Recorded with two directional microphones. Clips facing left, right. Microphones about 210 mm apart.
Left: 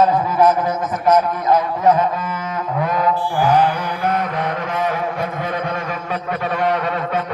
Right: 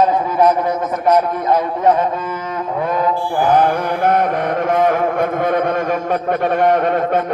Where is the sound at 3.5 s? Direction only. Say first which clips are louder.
Right 3 dB; 50° right (ahead or behind).